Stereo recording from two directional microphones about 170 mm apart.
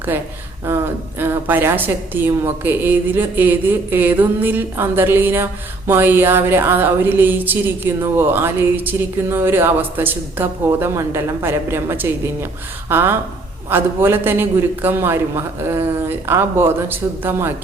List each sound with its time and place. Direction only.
0.1 s a woman's voice: 10° right (ahead or behind)